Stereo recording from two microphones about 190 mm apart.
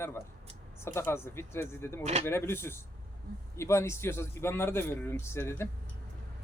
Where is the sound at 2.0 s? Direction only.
35° right (ahead or behind).